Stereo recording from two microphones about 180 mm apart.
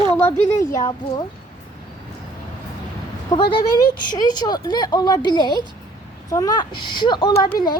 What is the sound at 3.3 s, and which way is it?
A woman's voice, 25° left (ahead or behind).